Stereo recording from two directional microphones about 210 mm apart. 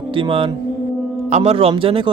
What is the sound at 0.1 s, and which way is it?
Mantra, 25° right (ahead or behind).